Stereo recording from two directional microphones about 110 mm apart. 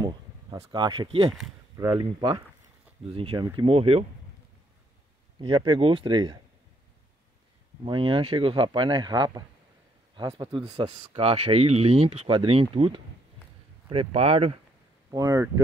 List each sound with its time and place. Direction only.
0.0 s a sound: 35° right (ahead or behind)
1.0 s speech: 60° right (ahead or behind)
1.8 s speech: 35° right (ahead or behind)
3.1 s speech: 55° right (ahead or behind)
5.4 s speech: 45° right (ahead or behind)
7.8 s speech: 50° right (ahead or behind)
10.8 s speech: 45° right (ahead or behind)
11.1 s speech: 60° right (ahead or behind)
13.8 s speech: 70° right (ahead or behind)
15.0 s speech: 30° right (ahead or behind)